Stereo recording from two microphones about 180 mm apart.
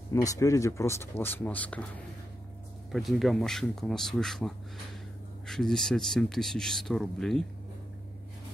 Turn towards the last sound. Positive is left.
turn(degrees=5)  # may be behind; listen again after turning